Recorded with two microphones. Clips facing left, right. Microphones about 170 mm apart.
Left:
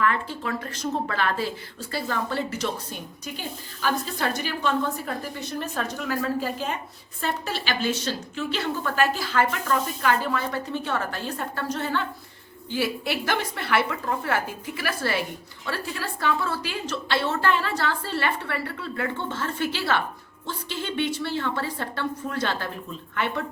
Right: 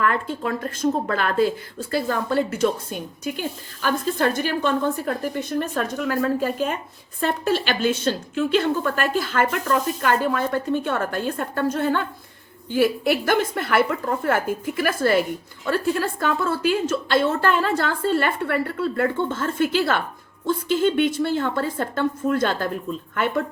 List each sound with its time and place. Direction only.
0.0 s a woman's voice: 45° right (ahead or behind)